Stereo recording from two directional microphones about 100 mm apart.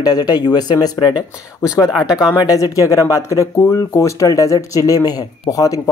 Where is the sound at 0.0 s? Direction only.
40° left (ahead or behind).